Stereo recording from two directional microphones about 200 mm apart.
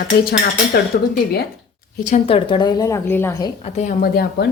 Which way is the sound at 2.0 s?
40° left (ahead or behind).